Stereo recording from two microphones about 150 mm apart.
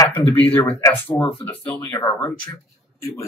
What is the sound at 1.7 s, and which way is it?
A man's voice, 30° left (ahead or behind).